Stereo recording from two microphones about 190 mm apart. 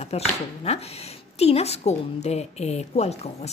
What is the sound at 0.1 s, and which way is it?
Speech, 35° left (ahead or behind).